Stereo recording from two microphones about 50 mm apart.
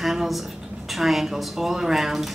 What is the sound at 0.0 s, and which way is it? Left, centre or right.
Speech, centre.